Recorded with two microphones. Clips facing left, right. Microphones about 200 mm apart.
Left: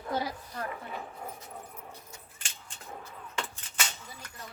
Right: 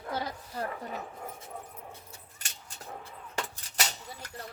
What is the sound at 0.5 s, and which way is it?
Speech, 35° right (ahead or behind).